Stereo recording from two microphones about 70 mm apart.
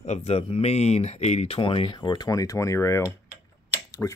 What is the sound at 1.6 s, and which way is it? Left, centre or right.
Speech, left.